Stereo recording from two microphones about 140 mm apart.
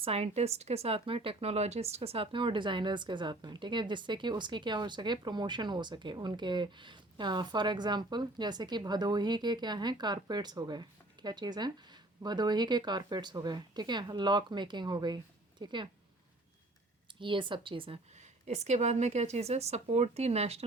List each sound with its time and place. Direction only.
0.0 s speech: 50° right (ahead or behind)
17.2 s speech: 35° right (ahead or behind)
18.1 s a woman's voice: 55° right (ahead or behind)